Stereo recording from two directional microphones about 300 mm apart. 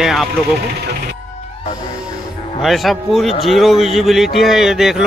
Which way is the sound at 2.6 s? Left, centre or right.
Centre.